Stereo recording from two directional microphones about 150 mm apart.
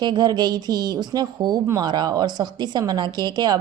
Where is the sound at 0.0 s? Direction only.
30° right (ahead or behind).